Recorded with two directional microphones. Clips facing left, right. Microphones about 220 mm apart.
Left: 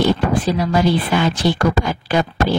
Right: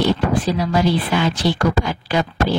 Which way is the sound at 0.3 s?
50° left (ahead or behind).